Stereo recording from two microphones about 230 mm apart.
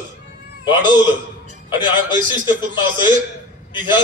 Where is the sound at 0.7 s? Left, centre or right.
Centre.